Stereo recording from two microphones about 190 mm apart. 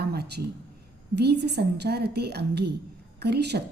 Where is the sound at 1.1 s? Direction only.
60° right (ahead or behind).